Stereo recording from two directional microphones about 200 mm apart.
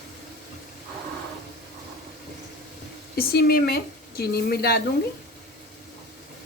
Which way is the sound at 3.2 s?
50° left (ahead or behind).